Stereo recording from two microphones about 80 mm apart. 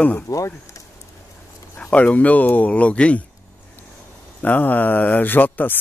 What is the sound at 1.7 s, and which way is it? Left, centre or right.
Speech, centre.